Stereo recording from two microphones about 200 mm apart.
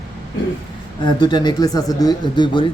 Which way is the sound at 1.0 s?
20° left (ahead or behind).